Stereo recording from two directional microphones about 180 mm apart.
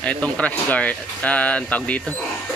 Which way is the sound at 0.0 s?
5° left (ahead or behind).